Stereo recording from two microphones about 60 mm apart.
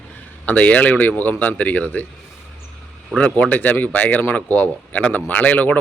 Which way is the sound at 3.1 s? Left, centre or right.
Centre.